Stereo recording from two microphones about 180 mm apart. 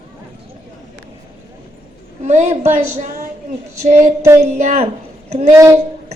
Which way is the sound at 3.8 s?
40° right (ahead or behind).